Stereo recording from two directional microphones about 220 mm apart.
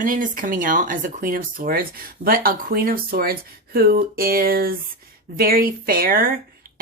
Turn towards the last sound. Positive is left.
turn(degrees=-40)  # may be behind; listen again after turning